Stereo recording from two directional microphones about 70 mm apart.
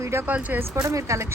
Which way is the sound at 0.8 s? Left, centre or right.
Right.